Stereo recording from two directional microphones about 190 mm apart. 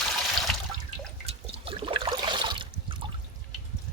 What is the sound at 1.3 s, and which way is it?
Water, 30° right (ahead or behind).